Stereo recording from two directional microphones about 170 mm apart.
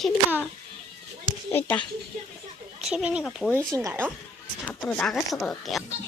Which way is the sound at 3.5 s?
15° right (ahead or behind).